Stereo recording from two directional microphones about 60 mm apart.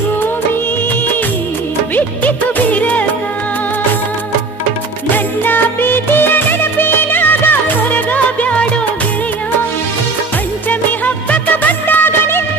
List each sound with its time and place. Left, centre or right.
2.0 s music: left
5.1 s music of bollywood: left
10.7 s music of bollywood: left